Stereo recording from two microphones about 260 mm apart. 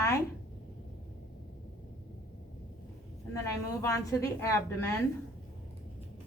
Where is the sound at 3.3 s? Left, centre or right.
Centre.